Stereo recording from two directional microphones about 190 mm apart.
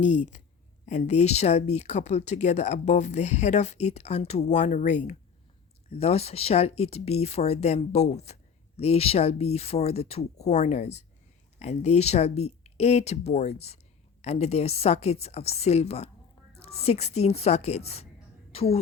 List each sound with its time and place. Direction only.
0.0 s a woman's voice: 40° left (ahead or behind)